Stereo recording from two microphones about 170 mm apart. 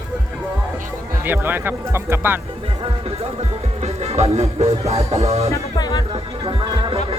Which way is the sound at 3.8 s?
40° right (ahead or behind).